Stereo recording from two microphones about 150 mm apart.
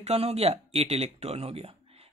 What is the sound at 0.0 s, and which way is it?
Speech, 45° right (ahead or behind).